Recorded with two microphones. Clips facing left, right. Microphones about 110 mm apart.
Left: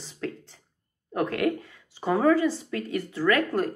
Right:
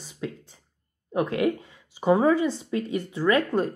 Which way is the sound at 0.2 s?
15° right (ahead or behind).